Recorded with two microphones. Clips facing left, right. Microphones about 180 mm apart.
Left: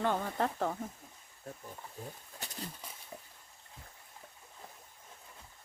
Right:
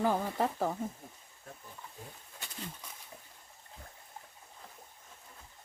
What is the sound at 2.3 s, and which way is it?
Wild animals, 40° left (ahead or behind).